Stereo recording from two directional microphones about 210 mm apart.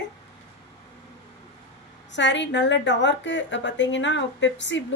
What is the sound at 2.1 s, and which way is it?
A woman's voice, 60° left (ahead or behind).